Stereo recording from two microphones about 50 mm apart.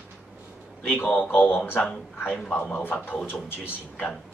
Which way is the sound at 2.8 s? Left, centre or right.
Left.